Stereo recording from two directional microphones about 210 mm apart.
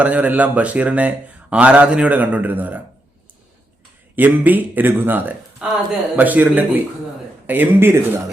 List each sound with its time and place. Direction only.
0.0 s speech: 5° right (ahead or behind)
4.1 s speech: 10° right (ahead or behind)